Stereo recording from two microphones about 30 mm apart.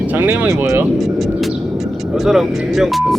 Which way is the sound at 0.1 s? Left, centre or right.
Right.